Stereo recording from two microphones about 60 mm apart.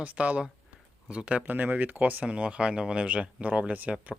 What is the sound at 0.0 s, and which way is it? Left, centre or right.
Speech, right.